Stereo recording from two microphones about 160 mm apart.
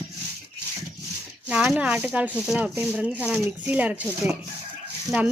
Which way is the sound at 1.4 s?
5° right (ahead or behind).